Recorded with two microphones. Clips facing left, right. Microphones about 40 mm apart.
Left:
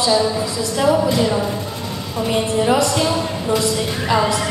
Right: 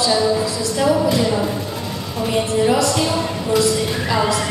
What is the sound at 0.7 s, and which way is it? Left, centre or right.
Speech, centre.